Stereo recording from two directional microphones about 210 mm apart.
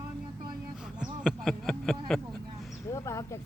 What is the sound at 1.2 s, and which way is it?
Speech, centre (ahead or behind).